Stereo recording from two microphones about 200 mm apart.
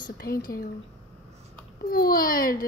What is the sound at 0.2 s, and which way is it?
Speech, 50° left (ahead or behind).